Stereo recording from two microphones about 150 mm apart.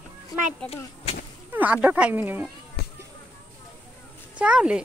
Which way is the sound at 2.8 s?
90° left.